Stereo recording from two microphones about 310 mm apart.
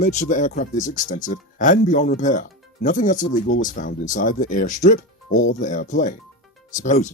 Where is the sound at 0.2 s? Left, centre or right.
Left.